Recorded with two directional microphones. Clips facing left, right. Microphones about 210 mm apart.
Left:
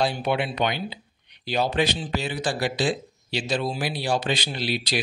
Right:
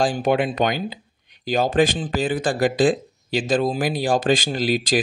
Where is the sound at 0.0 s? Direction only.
45° right (ahead or behind).